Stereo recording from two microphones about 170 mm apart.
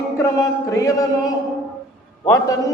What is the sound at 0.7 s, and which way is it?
A man's voice, 20° left (ahead or behind).